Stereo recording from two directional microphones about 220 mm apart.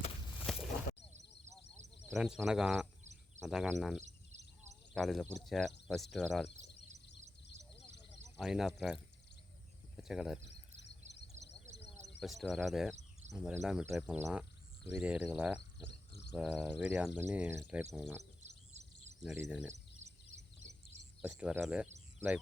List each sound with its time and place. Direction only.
0.5 s a sound: centre (ahead or behind)
2.1 s speech: centre (ahead or behind)
3.0 s a sound: 30° right (ahead or behind)
3.4 s speech: centre (ahead or behind)
8.4 s speech: centre (ahead or behind)
10.0 s speech: centre (ahead or behind)
12.2 s speech: centre (ahead or behind)
18.2 s bird: 30° right (ahead or behind)
19.2 s speech: 5° right (ahead or behind)
21.2 s speech: 5° right (ahead or behind)